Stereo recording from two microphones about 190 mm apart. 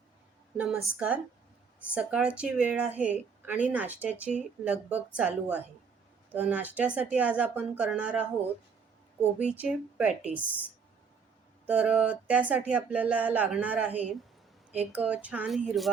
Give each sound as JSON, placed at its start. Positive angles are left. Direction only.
{"t": 0.5, "sound": "a woman's voice", "side_deg": -5}
{"t": 9.4, "sound": "a woman's voice", "side_deg": -5}
{"t": 11.6, "sound": "a woman's voice", "side_deg": -5}